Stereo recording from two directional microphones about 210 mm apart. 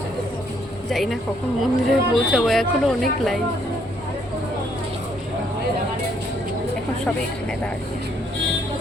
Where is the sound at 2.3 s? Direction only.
Centre (ahead or behind).